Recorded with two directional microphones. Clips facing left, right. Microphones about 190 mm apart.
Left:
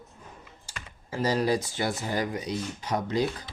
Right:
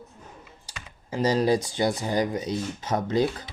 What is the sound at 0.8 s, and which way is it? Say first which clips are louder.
Speech: right 3 dB; 20° right (ahead or behind).